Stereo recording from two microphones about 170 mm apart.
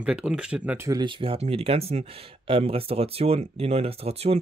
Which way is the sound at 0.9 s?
25° right (ahead or behind).